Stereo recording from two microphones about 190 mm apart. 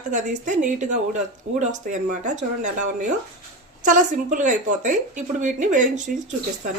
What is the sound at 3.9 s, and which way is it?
Speech, 40° right (ahead or behind).